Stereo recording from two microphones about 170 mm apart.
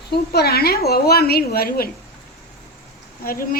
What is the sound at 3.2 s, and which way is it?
Speech, 60° left (ahead or behind).